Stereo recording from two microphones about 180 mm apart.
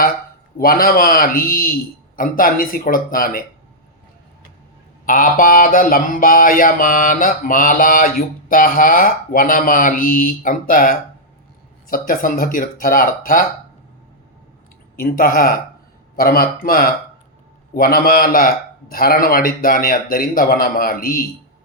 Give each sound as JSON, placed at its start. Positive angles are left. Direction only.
{"t": 0.6, "sound": "mantra", "side_deg": 55}
{"t": 5.0, "sound": "mantra", "side_deg": 50}
{"t": 14.9, "sound": "mantra", "side_deg": 55}
{"t": 16.1, "sound": "speech", "side_deg": 55}
{"t": 17.7, "sound": "mantra", "side_deg": 55}